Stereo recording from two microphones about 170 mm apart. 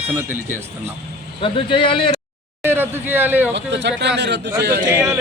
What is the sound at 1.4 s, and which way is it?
Speech, 30° left (ahead or behind).